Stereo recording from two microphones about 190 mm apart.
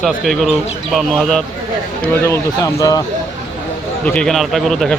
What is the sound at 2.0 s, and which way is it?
Speech, 15° left (ahead or behind).